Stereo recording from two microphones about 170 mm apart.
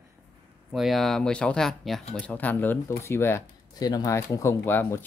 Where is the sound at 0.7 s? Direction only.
Centre (ahead or behind).